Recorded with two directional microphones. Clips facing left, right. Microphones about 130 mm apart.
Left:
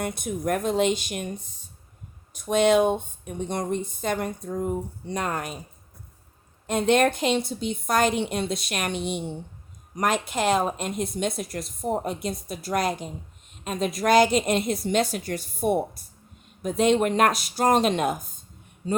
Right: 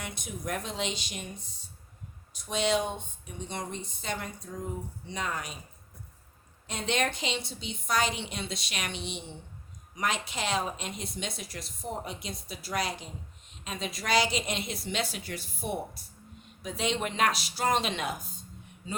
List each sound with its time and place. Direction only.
0.0 s speech: 50° left (ahead or behind)
2.3 s speech: 55° left (ahead or behind)
6.7 s speech: 50° left (ahead or behind)